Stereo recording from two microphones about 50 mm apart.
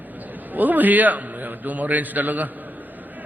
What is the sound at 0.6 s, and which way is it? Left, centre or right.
A man's voice, right.